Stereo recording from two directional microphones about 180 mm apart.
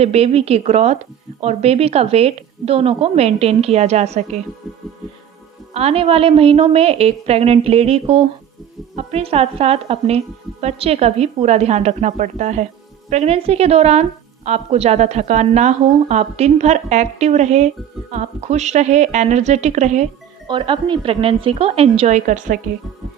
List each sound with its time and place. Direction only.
0.0 s a woman's voice: 35° right (ahead or behind)
5.7 s a woman's voice: 35° right (ahead or behind)
20.5 s a woman's voice: 25° right (ahead or behind); by 22.5 s 45° right (ahead or behind)